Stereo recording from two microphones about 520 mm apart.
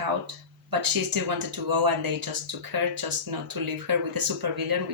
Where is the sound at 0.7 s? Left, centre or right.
Right.